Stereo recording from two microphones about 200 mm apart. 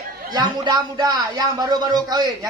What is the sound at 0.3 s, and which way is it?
A man's voice, 20° right (ahead or behind).